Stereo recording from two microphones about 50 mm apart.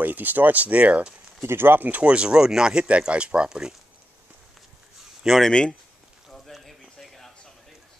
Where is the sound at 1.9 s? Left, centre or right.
Right.